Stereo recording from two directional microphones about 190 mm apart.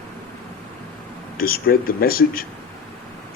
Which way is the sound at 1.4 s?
50° left (ahead or behind).